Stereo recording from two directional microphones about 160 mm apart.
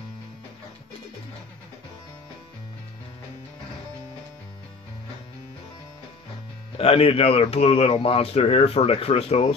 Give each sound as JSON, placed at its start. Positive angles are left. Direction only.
{"t": 6.8, "sound": "speech", "side_deg": 35}